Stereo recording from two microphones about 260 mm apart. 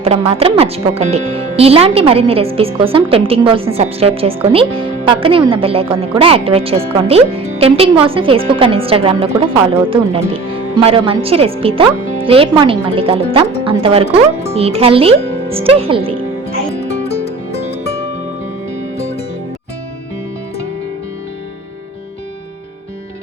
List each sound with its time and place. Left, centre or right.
0.0 s a woman's voice: right
17.2 s music: left